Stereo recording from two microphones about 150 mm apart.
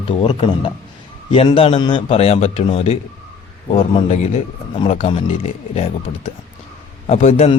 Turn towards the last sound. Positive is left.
turn(degrees=45)  # may be behind; listen again after turning